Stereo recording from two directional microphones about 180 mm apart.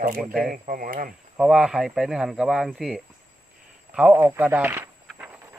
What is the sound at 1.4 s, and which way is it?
Speech, 5° right (ahead or behind).